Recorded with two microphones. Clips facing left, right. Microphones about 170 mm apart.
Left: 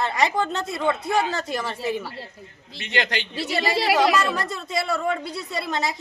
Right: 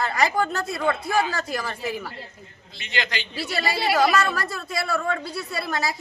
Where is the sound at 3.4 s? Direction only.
20° left (ahead or behind).